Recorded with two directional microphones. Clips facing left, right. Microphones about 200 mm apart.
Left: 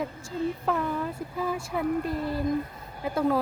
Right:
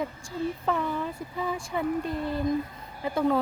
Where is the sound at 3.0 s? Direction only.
5° left (ahead or behind).